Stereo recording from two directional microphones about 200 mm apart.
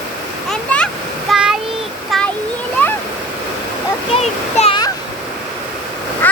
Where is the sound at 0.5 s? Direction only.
5° left (ahead or behind).